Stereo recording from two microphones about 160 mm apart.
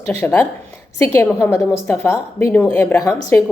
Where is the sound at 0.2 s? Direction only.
10° left (ahead or behind).